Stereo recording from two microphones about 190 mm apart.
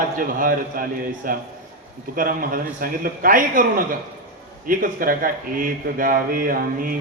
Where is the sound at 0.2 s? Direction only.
45° right (ahead or behind).